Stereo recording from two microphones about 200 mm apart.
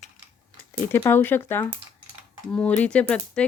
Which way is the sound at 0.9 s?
10° left (ahead or behind).